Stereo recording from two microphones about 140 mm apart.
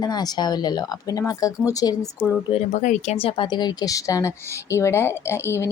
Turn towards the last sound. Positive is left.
turn(degrees=20)  # may be behind; listen again after turning